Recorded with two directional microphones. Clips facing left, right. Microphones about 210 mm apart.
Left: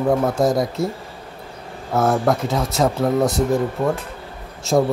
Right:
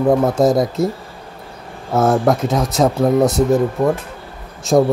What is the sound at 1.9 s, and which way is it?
Speech, 20° right (ahead or behind).